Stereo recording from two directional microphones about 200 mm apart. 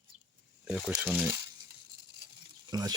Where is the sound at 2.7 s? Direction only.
20° right (ahead or behind).